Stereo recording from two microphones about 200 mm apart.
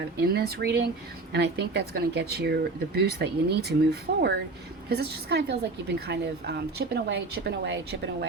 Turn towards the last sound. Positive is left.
turn(degrees=-55)  # may be behind; listen again after turning